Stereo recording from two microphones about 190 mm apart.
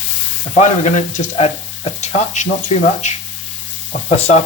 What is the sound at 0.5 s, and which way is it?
Speech, 40° left (ahead or behind).